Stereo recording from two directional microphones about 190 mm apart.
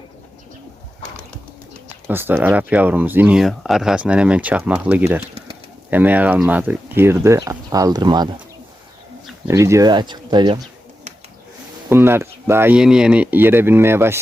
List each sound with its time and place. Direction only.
2.0 s speech: 10° right (ahead or behind)
5.2 s a sound: 30° right (ahead or behind)
5.9 s speech: 10° right (ahead or behind)
9.5 s speech: 15° right (ahead or behind)
11.9 s speech: 10° right (ahead or behind)